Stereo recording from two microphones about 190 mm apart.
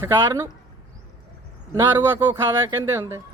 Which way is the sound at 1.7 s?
10° right (ahead or behind).